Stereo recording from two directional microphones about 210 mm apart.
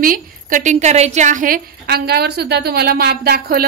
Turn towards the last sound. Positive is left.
turn(degrees=-45)  # may be behind; listen again after turning